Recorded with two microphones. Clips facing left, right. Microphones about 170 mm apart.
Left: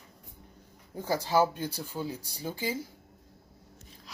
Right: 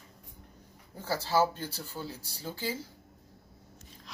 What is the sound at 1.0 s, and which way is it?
Speech, 15° left (ahead or behind).